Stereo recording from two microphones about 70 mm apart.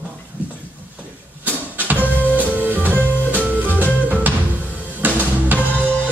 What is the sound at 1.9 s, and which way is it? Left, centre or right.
Music, right.